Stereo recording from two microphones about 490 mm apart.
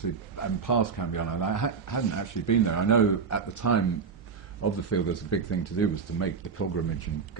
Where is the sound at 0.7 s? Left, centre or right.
Left.